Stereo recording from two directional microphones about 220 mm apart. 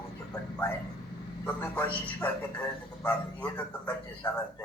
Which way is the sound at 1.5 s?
5° left (ahead or behind).